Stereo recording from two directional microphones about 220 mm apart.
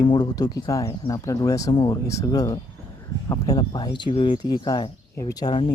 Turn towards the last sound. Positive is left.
turn(degrees=20)  # may be behind; listen again after turning